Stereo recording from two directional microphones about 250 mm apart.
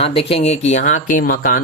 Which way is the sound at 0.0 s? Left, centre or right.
Left.